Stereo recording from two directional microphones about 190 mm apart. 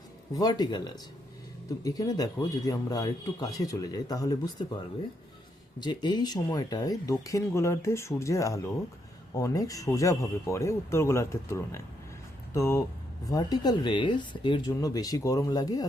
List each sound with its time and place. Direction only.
0.3 s a man's voice: 20° left (ahead or behind)
5.8 s a man's voice: 20° left (ahead or behind)